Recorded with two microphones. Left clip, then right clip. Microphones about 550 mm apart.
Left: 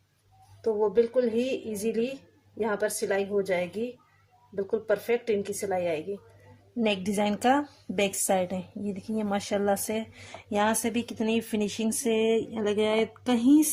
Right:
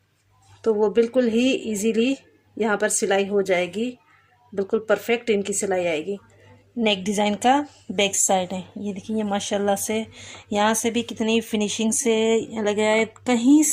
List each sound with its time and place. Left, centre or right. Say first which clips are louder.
0.6 s speech: right 5 dB; centre
6.7 s a woman's voice: right 5 dB; left